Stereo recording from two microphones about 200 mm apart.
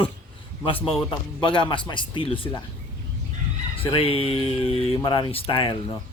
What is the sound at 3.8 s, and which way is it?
Speech, 25° left (ahead or behind).